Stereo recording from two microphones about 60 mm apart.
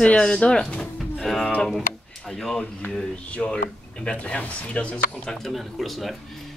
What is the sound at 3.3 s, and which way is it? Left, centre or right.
Speech, centre.